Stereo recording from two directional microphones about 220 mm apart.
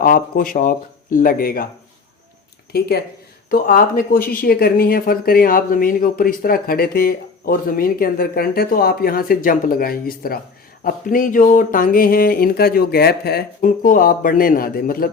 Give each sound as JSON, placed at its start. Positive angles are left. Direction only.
{"t": 0.0, "sound": "speech", "side_deg": 40}
{"t": 3.5, "sound": "speech", "side_deg": 40}